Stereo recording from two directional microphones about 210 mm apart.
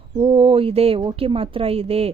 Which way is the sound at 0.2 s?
25° right (ahead or behind).